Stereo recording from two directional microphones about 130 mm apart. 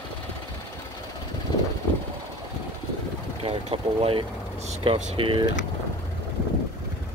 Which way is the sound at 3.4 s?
45° right (ahead or behind).